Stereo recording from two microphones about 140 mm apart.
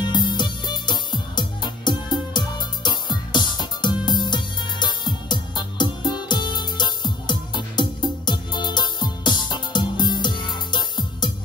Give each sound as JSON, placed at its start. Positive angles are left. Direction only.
{"t": 0.0, "sound": "music", "side_deg": 30}